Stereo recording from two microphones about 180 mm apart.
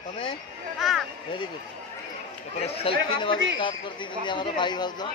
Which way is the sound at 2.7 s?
30° left (ahead or behind).